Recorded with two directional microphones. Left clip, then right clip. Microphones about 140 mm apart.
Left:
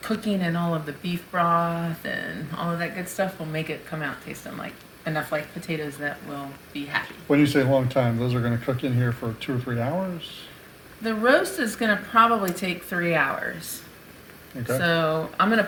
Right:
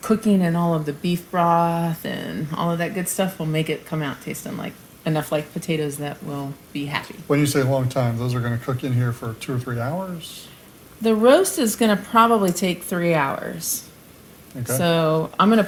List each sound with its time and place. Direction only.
0.0 s speech: 40° right (ahead or behind)
7.3 s speech: centre (ahead or behind)
11.0 s speech: 50° right (ahead or behind)